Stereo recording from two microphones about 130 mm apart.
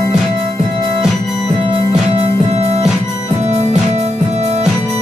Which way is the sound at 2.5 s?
55° right (ahead or behind).